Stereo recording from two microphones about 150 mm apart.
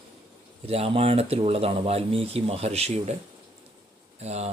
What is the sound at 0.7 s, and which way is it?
Speech, 40° right (ahead or behind).